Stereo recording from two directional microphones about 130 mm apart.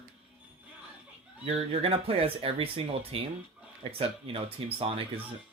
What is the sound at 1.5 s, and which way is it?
Speech, 50° right (ahead or behind).